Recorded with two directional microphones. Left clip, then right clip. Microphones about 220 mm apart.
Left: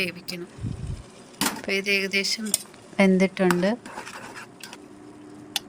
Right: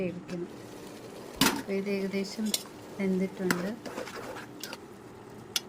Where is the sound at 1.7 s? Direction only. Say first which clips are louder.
Left 9 dB; 50° left (ahead or behind).